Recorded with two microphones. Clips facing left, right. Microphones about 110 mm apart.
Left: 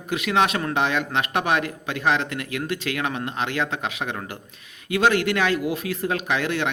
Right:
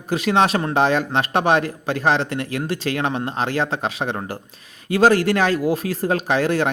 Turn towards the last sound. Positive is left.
turn(degrees=-40)  # may be behind; listen again after turning